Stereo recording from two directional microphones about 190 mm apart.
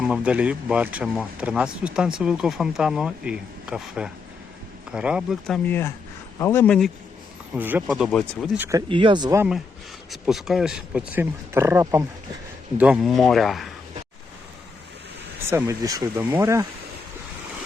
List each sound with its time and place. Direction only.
0.0 s speech: 5° right (ahead or behind)
5.6 s speech: 10° left (ahead or behind)
7.5 s speech: 10° right (ahead or behind)
8.9 s speech: 25° right (ahead or behind)
10.1 s speech: centre (ahead or behind)
15.4 s speech: 15° right (ahead or behind)